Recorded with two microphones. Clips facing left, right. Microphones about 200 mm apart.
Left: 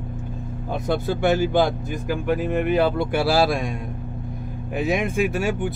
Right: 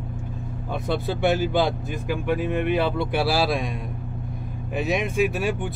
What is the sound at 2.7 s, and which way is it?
Speech, 50° left (ahead or behind).